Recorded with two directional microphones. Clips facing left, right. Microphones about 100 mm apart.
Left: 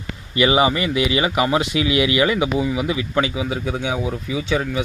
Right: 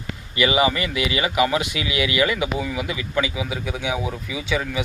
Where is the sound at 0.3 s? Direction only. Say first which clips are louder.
Left 3 dB; 30° left (ahead or behind).